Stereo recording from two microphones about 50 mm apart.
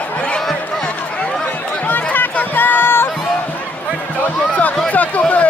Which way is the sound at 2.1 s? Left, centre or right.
Left.